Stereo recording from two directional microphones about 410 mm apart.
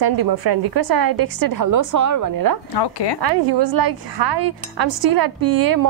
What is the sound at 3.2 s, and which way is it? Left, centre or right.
A woman's voice, right.